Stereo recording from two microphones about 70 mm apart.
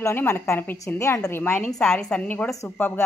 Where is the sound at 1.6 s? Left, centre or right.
Centre.